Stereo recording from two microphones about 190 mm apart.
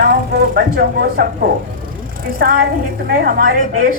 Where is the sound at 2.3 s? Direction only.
50° right (ahead or behind).